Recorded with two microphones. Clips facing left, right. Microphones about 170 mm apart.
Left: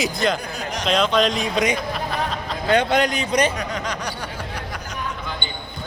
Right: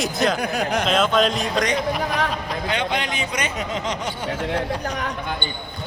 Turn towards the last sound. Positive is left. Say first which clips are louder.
# right 1 dB
turn(degrees=-25)  # may be behind; listen again after turning